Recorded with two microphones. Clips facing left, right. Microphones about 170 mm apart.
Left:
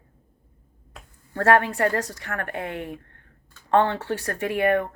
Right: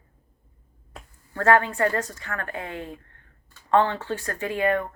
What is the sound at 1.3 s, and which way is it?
A woman's voice, 70° left (ahead or behind).